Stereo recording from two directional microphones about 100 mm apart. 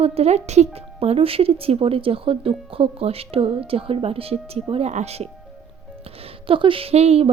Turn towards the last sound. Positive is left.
turn(degrees=-90)